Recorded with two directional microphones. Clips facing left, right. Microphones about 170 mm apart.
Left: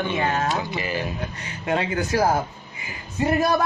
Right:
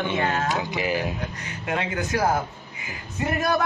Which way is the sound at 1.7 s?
30° left (ahead or behind).